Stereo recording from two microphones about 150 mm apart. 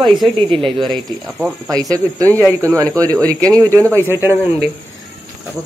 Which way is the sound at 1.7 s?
25° right (ahead or behind).